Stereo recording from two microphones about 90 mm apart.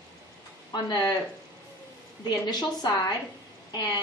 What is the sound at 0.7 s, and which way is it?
Speech, 50° left (ahead or behind).